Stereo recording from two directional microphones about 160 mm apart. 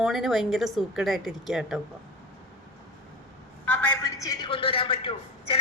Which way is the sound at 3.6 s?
10° left (ahead or behind).